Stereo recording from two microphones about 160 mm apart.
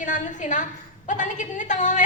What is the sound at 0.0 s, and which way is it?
A woman's voice, 50° left (ahead or behind).